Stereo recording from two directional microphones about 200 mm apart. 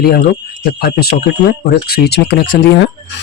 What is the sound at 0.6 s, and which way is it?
Speech, 50° left (ahead or behind).